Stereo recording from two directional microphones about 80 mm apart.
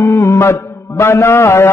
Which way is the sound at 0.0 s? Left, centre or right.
Left.